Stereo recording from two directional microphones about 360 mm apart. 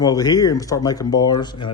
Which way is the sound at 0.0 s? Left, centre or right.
Centre.